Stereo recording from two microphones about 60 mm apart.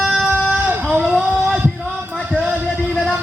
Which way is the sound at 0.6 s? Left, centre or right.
Right.